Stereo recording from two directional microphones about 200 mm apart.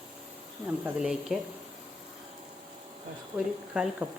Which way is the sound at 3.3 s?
5° right (ahead or behind).